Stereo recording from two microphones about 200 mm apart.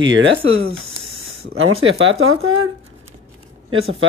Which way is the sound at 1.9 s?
80° right.